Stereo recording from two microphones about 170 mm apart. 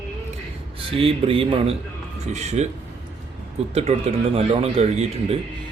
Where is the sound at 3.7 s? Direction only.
35° right (ahead or behind).